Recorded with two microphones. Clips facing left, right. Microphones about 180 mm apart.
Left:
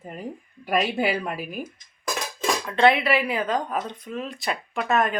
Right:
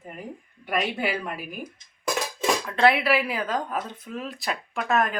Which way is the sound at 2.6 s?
Centre (ahead or behind).